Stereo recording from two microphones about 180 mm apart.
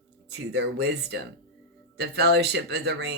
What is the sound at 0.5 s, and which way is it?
Speech, 70° right (ahead or behind).